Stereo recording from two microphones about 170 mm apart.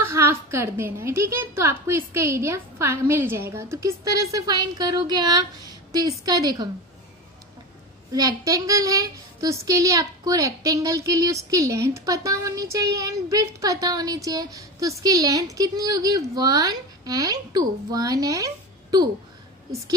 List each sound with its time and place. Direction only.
0.0 s a woman's voice: 15° right (ahead or behind)
8.1 s speech: 20° right (ahead or behind)